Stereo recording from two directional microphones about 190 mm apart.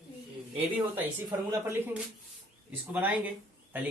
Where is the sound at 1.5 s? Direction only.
10° right (ahead or behind).